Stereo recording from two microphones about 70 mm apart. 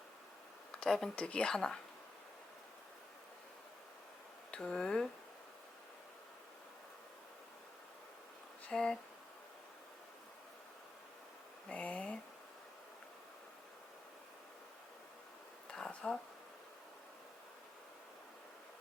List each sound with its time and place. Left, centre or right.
0.8 s speech: centre
4.5 s speech: centre
8.7 s speech: centre
11.7 s speech: centre
15.7 s a sound: centre